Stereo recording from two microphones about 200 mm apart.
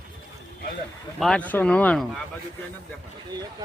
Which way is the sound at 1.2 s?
5° left (ahead or behind).